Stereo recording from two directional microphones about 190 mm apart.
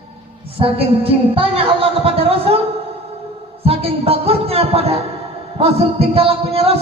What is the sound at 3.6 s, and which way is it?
Speech, 30° right (ahead or behind).